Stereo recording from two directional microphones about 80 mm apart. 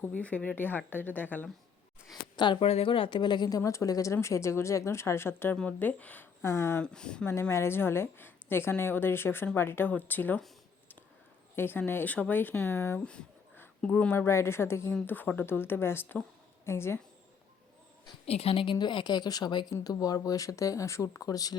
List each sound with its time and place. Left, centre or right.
0.0 s a woman's voice: centre
2.3 s speech: left
3.6 s speech: left
5.5 s speech: centre
6.4 s speech: left
6.8 s speech: centre
7.5 s a woman's voice: left
11.5 s a woman's voice: left
14.1 s a woman's voice: left
18.5 s speech: left
19.8 s speech: left